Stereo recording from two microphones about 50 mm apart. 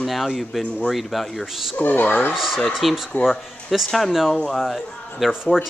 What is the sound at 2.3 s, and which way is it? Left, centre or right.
Speech, centre.